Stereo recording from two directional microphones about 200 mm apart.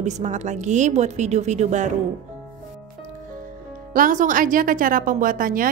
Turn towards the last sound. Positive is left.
turn(degrees=-45)  # may be behind; listen again after turning